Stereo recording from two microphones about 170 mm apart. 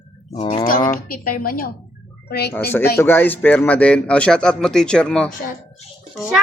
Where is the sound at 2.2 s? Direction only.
70° left (ahead or behind).